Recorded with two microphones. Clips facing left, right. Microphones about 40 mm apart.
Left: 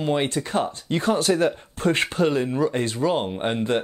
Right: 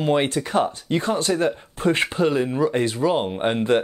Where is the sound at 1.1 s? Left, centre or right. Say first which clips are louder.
Left 3 dB; centre.